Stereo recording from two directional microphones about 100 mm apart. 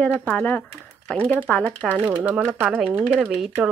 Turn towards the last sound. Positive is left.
turn(degrees=-5)  # may be behind; listen again after turning